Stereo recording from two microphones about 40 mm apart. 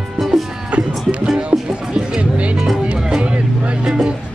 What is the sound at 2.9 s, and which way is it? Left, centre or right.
Vehicle, right.